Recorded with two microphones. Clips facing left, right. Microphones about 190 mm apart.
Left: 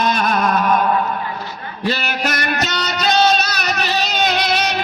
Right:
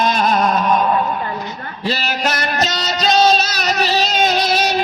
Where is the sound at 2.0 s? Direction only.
30° right (ahead or behind).